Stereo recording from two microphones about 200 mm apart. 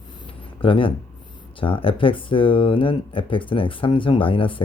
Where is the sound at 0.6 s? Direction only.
25° left (ahead or behind).